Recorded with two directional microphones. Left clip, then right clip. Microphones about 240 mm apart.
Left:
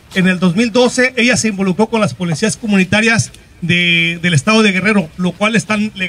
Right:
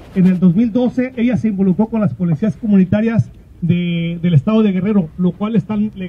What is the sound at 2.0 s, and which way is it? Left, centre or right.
A man's voice, left.